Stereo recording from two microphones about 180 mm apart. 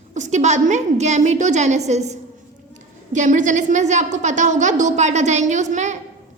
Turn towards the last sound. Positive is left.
turn(degrees=-40)  # may be behind; listen again after turning